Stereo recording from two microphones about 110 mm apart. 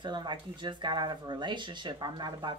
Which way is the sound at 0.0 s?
45° right (ahead or behind).